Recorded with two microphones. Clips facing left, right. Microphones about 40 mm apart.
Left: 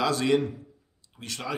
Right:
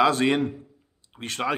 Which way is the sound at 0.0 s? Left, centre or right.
Right.